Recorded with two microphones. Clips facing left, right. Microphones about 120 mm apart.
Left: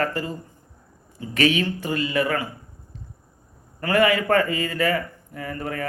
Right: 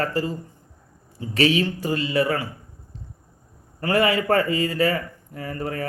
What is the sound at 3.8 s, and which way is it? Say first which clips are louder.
A man's voice: left 1 dB; 30° right (ahead or behind).